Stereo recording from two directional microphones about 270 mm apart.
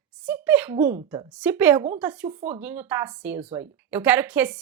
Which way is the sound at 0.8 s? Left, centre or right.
Right.